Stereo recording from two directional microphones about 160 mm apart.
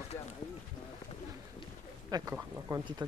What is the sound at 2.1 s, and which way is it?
Speech, 20° right (ahead or behind).